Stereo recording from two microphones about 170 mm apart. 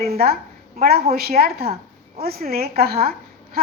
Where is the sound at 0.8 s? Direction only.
65° right (ahead or behind).